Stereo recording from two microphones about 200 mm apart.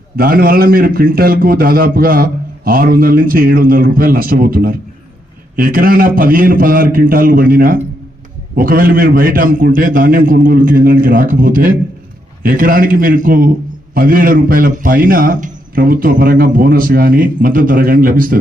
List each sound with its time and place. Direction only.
0.2 s a man's voice: 45° right (ahead or behind)